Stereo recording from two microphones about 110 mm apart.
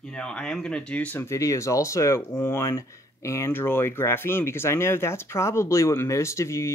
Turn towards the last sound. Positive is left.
turn(degrees=25)  # may be behind; listen again after turning